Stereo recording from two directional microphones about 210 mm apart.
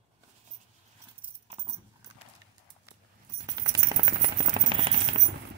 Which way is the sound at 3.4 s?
20° right (ahead or behind).